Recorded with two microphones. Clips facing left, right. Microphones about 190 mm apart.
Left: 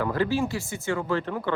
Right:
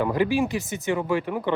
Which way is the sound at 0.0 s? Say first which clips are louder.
Right 3 dB; 15° right (ahead or behind).